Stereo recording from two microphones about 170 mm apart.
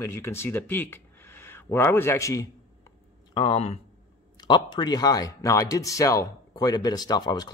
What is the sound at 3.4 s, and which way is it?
Speech, 35° left (ahead or behind).